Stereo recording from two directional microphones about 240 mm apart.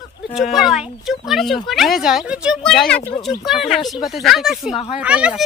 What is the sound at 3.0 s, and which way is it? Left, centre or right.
Speech, centre.